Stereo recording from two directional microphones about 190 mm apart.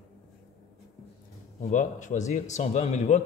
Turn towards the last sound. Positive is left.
turn(degrees=35)  # may be behind; listen again after turning